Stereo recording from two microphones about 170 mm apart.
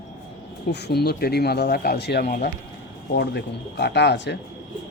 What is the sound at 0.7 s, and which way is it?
Speech, 70° left (ahead or behind).